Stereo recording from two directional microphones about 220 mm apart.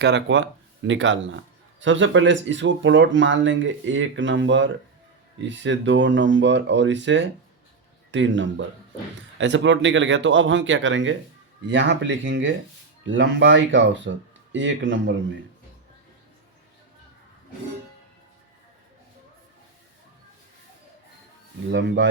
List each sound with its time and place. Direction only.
0.0 s speech: 55° right (ahead or behind)
21.7 s speech: 55° right (ahead or behind)